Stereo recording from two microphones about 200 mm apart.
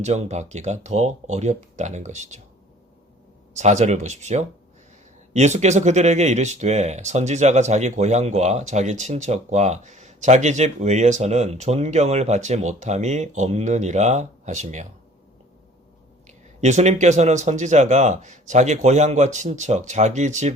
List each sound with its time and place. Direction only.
0.0 s speech: 35° right (ahead or behind)
3.5 s speech: 35° right (ahead or behind)
16.6 s speech: 35° right (ahead or behind)